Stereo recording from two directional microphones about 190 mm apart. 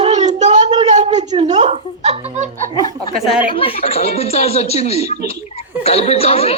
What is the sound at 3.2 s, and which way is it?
Speech, centre (ahead or behind).